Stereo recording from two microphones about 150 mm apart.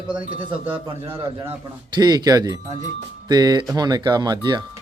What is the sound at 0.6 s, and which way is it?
Speech, 15° right (ahead or behind).